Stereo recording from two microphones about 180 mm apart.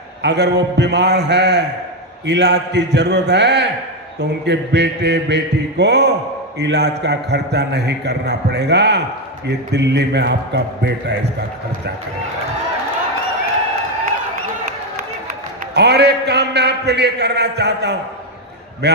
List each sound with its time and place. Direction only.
0.2 s a man's voice: 70° right (ahead or behind)
15.7 s a man's voice: 65° right (ahead or behind)